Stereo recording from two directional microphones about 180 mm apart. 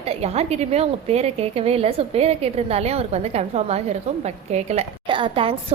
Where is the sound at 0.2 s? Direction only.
35° right (ahead or behind).